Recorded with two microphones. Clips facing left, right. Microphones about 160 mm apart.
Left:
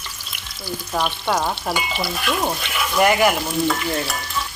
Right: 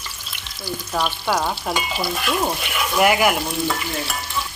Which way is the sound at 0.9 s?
Centre (ahead or behind).